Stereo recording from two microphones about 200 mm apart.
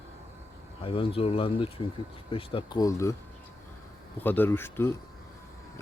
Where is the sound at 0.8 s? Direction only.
25° left (ahead or behind).